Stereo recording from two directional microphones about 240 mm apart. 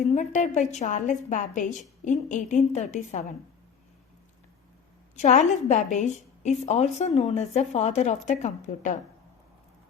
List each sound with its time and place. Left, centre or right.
0.1 s a woman's voice: left
5.1 s a woman's voice: left